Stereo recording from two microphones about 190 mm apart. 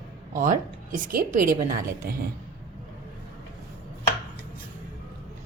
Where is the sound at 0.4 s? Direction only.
40° right (ahead or behind).